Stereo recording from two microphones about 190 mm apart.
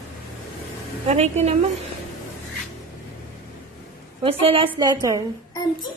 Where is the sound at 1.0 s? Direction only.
35° right (ahead or behind).